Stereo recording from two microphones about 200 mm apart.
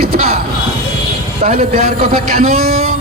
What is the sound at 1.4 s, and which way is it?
Speech, 45° right (ahead or behind).